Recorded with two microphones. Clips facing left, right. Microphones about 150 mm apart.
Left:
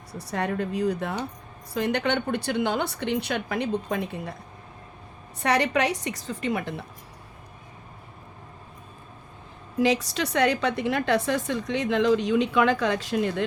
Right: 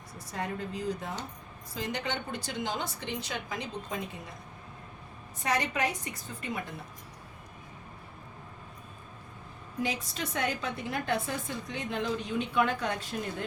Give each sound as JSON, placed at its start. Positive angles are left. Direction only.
{"t": 0.1, "sound": "a woman's voice", "side_deg": 70}
{"t": 5.4, "sound": "a woman's voice", "side_deg": 70}
{"t": 9.8, "sound": "a woman's voice", "side_deg": 85}